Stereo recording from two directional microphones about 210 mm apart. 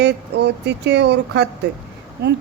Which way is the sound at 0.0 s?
55° right (ahead or behind).